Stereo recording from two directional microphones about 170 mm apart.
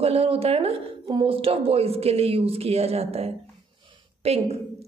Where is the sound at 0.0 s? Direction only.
35° right (ahead or behind).